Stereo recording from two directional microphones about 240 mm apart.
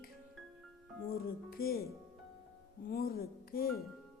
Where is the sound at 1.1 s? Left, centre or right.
Left.